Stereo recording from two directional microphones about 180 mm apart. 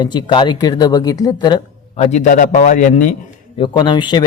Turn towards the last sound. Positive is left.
turn(degrees=25)  # may be behind; listen again after turning